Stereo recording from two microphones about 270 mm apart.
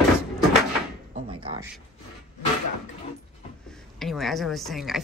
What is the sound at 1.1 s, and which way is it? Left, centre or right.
Speech, centre.